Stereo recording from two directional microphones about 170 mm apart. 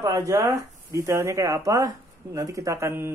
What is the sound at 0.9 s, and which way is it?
Speech, 15° right (ahead or behind).